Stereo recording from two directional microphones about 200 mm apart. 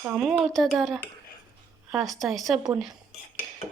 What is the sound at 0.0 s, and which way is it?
Speech, 5° right (ahead or behind).